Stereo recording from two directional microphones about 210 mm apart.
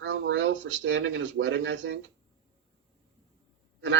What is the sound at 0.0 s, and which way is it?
Speech, 60° right (ahead or behind).